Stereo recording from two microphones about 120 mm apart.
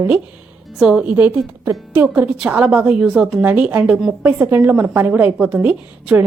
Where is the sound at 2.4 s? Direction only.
5° right (ahead or behind).